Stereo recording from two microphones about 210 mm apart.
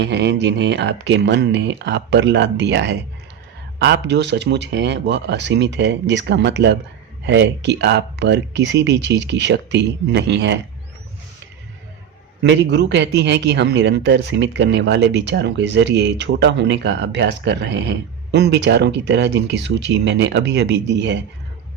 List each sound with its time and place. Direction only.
0.0 s a man's voice: 55° right (ahead or behind)
12.4 s a man's voice: 55° right (ahead or behind)